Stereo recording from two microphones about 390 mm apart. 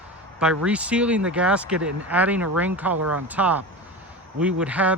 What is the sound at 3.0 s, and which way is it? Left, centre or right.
Speech, right.